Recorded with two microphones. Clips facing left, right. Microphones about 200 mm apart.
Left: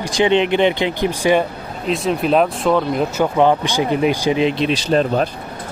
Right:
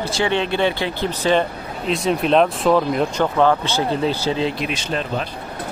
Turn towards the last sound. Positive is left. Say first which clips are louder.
# left 8 dB
turn(degrees=40)  # may be behind; listen again after turning